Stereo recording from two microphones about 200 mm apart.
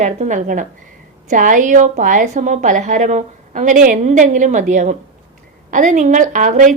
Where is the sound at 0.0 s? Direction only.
35° right (ahead or behind).